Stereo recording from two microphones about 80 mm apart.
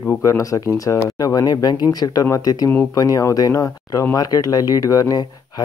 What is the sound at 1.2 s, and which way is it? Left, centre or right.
Speech, left.